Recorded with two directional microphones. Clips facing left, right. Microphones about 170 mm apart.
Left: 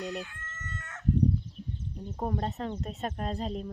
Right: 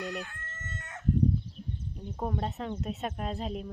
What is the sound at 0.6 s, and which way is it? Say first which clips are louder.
Chicken: even; 25° right (ahead or behind).